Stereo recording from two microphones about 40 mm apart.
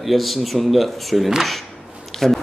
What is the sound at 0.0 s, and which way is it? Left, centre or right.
A man's voice, centre.